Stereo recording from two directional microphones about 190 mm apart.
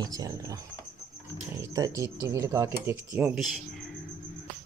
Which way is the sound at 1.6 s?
15° right (ahead or behind).